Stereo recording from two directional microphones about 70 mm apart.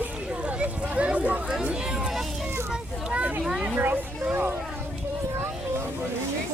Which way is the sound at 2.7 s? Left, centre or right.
Centre.